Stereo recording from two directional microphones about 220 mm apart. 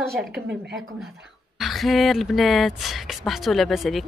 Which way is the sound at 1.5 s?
Centre (ahead or behind).